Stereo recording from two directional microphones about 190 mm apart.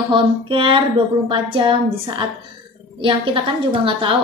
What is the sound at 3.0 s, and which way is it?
A woman's voice, 25° right (ahead or behind).